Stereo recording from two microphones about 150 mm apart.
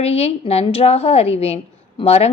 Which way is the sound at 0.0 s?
45° left (ahead or behind).